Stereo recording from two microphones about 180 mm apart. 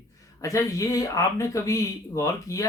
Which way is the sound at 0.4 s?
15° left (ahead or behind).